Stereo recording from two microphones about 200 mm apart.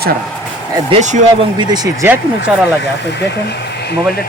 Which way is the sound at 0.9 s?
35° right (ahead or behind).